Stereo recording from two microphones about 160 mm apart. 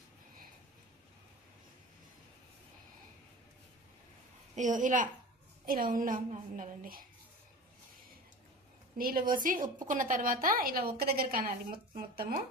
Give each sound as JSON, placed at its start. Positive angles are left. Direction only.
{"t": 4.5, "sound": "a woman's voice", "side_deg": -50}
{"t": 5.6, "sound": "a woman's voice", "side_deg": -65}
{"t": 9.0, "sound": "a woman's voice", "side_deg": -65}